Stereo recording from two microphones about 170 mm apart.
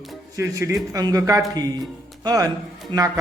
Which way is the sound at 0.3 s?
20° right (ahead or behind).